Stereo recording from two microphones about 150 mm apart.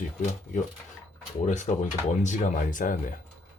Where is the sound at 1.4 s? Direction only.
55° left (ahead or behind).